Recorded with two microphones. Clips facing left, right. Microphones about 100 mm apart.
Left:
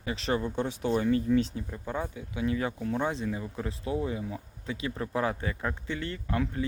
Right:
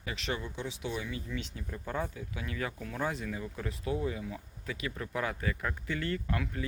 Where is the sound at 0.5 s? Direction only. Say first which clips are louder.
Left 9 dB; 50° left (ahead or behind).